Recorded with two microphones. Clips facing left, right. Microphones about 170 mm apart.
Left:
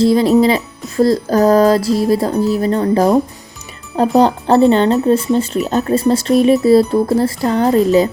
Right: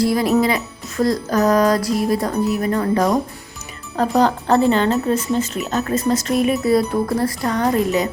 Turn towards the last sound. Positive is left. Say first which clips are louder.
# left 5 dB
turn(degrees=30)  # may be behind; listen again after turning